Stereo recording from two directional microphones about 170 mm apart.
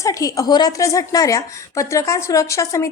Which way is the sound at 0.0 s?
20° left (ahead or behind).